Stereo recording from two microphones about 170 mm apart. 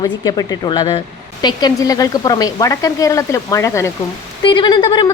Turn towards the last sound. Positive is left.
turn(degrees=25)  # may be behind; listen again after turning